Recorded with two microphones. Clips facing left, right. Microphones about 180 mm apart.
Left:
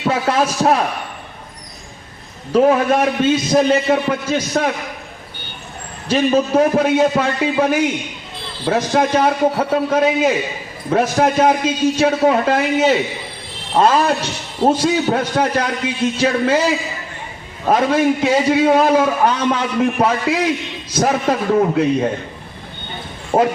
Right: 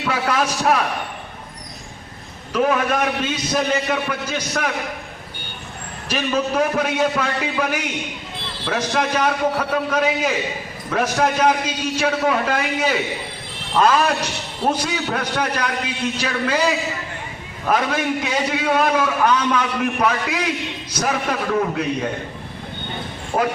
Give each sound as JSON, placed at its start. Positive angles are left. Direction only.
{"t": 0.0, "sound": "a man's voice", "side_deg": 30}
{"t": 2.5, "sound": "a man's voice", "side_deg": 30}
{"t": 6.1, "sound": "a man's voice", "side_deg": 30}
{"t": 17.7, "sound": "a man's voice", "side_deg": 30}
{"t": 23.3, "sound": "a man's voice", "side_deg": 25}